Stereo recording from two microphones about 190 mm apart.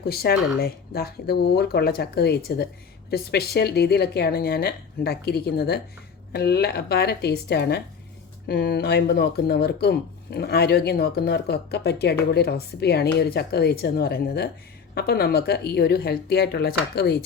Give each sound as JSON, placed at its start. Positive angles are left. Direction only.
{"t": 0.0, "sound": "speech", "side_deg": 55}